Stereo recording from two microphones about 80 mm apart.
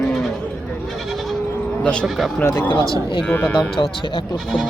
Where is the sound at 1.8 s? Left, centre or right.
Centre.